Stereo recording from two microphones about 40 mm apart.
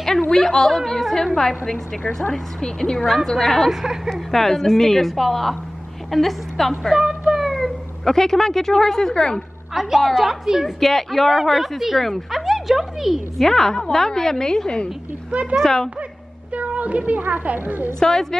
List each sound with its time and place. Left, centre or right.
0.3 s a woman's voice: centre
3.0 s speech: centre
3.3 s a woman's voice: centre
3.8 s speech: centre
4.1 s a woman's voice: centre
6.9 s speech: centre
7.3 s speech: centre
9.8 s speech: centre
10.8 s a woman's voice: centre
13.5 s a woman's voice: centre
16.5 s a woman's voice: right
17.9 s a woman's voice: centre